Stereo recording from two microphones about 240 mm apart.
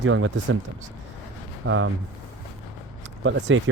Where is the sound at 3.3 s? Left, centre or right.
Right.